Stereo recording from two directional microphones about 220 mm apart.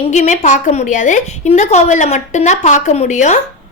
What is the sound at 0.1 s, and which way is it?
A woman's voice, 35° left (ahead or behind).